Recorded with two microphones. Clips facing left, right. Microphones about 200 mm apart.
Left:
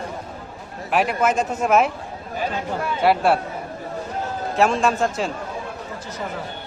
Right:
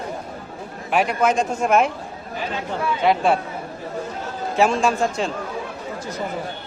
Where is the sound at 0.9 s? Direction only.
Centre (ahead or behind).